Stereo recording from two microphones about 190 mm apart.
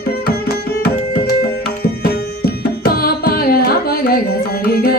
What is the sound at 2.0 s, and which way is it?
Music, 55° left (ahead or behind).